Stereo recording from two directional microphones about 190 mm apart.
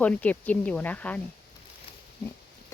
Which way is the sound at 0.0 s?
10° left (ahead or behind).